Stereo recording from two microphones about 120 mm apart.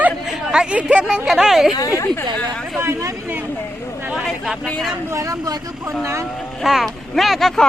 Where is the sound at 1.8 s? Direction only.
25° left (ahead or behind).